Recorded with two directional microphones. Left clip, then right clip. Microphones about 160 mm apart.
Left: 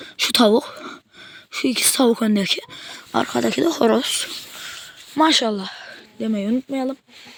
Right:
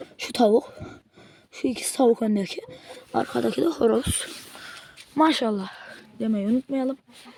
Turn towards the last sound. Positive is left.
turn(degrees=15)  # may be behind; listen again after turning